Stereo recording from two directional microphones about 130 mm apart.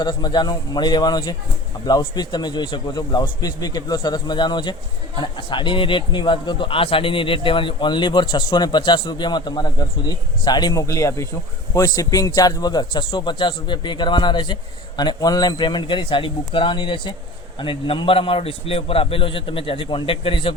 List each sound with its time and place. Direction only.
0.0 s a man's voice: 35° left (ahead or behind)